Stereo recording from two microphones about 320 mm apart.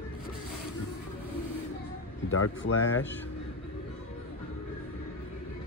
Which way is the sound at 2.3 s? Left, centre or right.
Left.